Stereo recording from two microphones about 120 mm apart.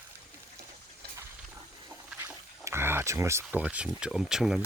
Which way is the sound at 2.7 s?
20° right (ahead or behind).